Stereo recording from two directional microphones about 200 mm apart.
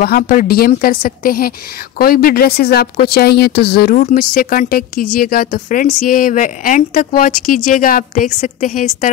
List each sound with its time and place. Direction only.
0.0 s a woman's voice: 45° left (ahead or behind)